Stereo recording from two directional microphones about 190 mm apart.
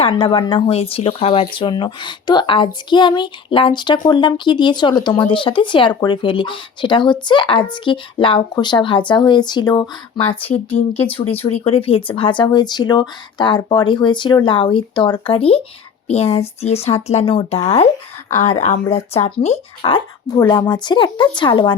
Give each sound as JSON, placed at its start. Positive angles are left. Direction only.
{"t": 0.0, "sound": "speech", "side_deg": 25}